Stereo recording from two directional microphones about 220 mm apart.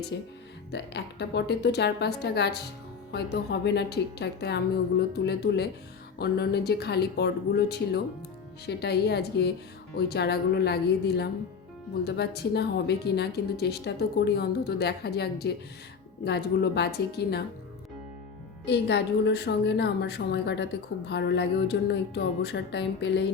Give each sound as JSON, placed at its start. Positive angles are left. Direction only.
{"t": 0.1, "sound": "speech", "side_deg": 50}
{"t": 18.6, "sound": "speech", "side_deg": 50}